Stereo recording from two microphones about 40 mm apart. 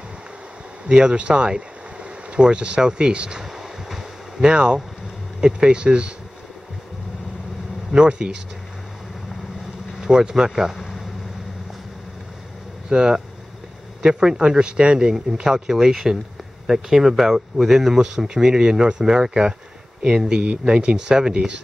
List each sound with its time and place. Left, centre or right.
0.8 s speech: right
3.5 s a sound: centre
5.4 s speech: right
7.9 s speech: right
10.0 s speech: centre
10.8 s a sound: centre
12.9 s speech: centre